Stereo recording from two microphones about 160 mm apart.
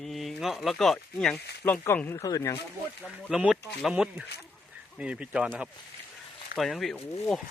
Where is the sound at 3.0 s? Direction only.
5° right (ahead or behind).